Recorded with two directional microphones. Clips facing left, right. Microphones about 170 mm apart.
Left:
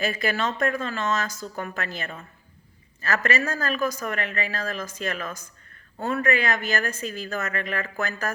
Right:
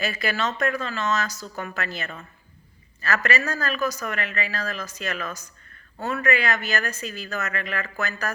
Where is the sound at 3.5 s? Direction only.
50° left (ahead or behind).